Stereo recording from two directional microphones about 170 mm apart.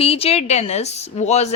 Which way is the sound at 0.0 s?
35° left (ahead or behind).